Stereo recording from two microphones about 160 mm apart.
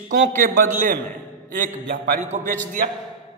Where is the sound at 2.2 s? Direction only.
50° right (ahead or behind).